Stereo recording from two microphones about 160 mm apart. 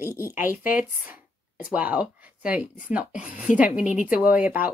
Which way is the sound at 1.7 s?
10° right (ahead or behind).